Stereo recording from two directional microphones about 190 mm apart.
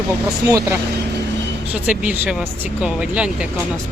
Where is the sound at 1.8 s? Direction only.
5° right (ahead or behind).